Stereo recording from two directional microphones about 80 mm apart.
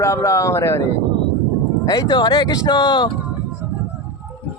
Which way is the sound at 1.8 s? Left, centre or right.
Left.